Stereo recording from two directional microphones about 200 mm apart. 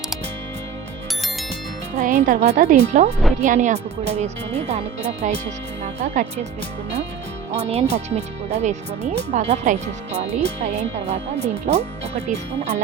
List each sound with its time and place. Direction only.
2.0 s speech: 40° right (ahead or behind)
7.5 s speech: 35° right (ahead or behind)